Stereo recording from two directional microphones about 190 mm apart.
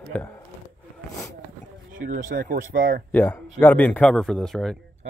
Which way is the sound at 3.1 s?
10° left (ahead or behind).